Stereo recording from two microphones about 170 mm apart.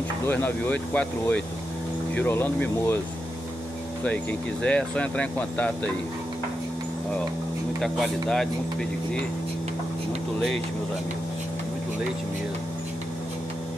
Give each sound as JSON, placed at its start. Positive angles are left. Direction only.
{"t": 0.3, "sound": "speech", "side_deg": 10}
{"t": 4.0, "sound": "speech", "side_deg": 5}
{"t": 7.8, "sound": "speech", "side_deg": 0}